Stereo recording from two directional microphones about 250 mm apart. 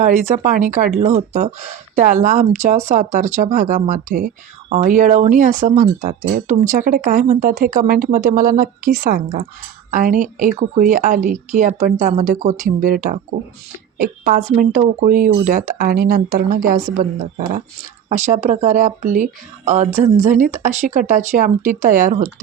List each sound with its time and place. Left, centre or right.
0.0 s speech: right